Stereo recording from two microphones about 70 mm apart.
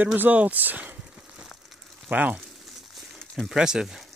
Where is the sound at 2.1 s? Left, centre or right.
Right.